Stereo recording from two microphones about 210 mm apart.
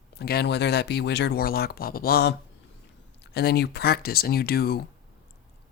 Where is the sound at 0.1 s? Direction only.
50° left (ahead or behind).